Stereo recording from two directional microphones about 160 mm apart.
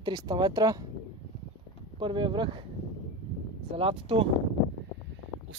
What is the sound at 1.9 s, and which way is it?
Speech, 30° right (ahead or behind).